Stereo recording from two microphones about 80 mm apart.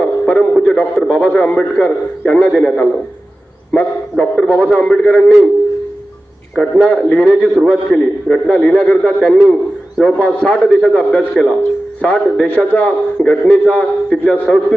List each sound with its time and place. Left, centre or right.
0.0 s radio: centre
0.5 s a man's voice: centre
4.2 s a man's voice: centre
6.8 s a man's voice: centre